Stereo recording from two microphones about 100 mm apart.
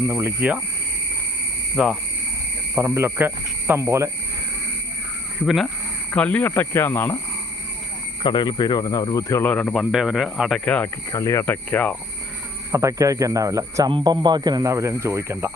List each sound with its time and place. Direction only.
0.1 s speech: 25° right (ahead or behind)
1.7 s speech: 10° right (ahead or behind)
2.7 s speech: 25° right (ahead or behind)
5.4 s speech: 5° right (ahead or behind)
6.1 s speech: 15° left (ahead or behind)
6.5 s speech: 25° left (ahead or behind)
8.2 s speech: 50° left (ahead or behind)
9.5 s speech: 15° left (ahead or behind)
9.7 s speech: 5° right (ahead or behind)
10.9 s speech: 30° left (ahead or behind)
11.4 s speech: 15° left (ahead or behind)
12.7 s speech: 30° right (ahead or behind)
13.9 s speech: 50° right (ahead or behind); by 15.5 s 30° right (ahead or behind)